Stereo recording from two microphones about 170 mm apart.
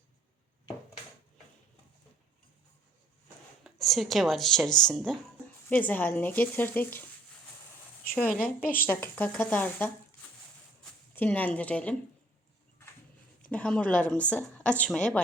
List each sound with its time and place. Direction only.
3.6 s a woman's voice: centre (ahead or behind)
8.1 s a woman's voice: 10° left (ahead or behind)
8.6 s speech: 60° left (ahead or behind)
8.9 s a woman's voice: 10° left (ahead or behind)
11.1 s a woman's voice: 10° left (ahead or behind)
13.4 s a woman's voice: 5° left (ahead or behind)